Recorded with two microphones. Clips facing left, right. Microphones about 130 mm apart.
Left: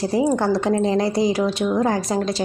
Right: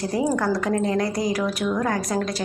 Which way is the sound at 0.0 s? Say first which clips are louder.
Left 3 dB; 25° left (ahead or behind).